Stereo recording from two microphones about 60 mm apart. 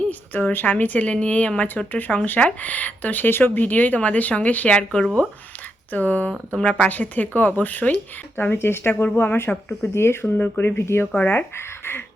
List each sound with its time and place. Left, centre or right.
0.1 s speech: left
4.8 s speech: centre
5.9 s speech: left
8.4 s speech: left
9.9 s speech: left
11.1 s speech: centre
11.5 s speech: left